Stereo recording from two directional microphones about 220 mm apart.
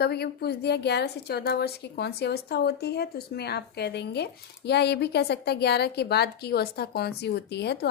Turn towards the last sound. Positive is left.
turn(degrees=50)  # may be behind; listen again after turning